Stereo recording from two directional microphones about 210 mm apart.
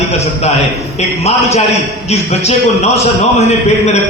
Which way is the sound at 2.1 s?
30° left (ahead or behind).